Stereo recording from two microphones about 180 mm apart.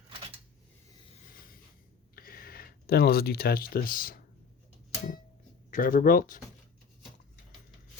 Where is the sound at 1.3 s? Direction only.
55° left (ahead or behind).